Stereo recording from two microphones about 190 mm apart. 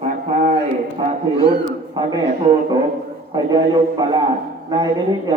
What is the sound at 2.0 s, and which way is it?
Speech, 20° right (ahead or behind).